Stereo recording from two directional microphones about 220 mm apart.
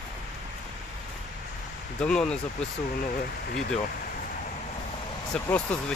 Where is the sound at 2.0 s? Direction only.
5° left (ahead or behind).